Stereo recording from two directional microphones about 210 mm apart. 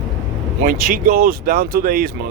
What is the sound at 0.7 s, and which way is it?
Speech, 40° right (ahead or behind).